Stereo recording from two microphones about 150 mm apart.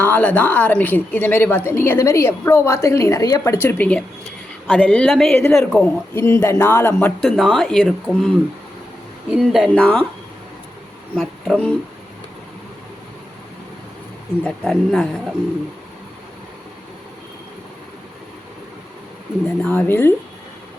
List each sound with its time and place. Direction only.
0.0 s a woman's voice: 10° left (ahead or behind)
6.1 s a woman's voice: 15° left (ahead or behind)
7.2 s a woman's voice: centre (ahead or behind)
9.7 s a woman's voice: 10° left (ahead or behind)
11.1 s speech: 5° left (ahead or behind)
14.4 s a woman's voice: 5° left (ahead or behind)
19.6 s a woman's voice: 15° left (ahead or behind)